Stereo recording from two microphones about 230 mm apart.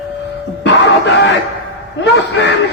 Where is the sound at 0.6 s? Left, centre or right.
Left.